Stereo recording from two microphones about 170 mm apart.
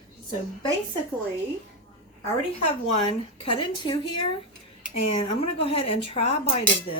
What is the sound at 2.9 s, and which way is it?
Speech, 35° left (ahead or behind).